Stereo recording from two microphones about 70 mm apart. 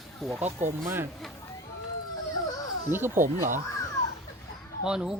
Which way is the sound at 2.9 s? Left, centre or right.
Right.